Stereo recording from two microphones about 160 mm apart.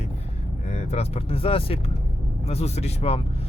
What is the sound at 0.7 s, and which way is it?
Speech, 40° left (ahead or behind).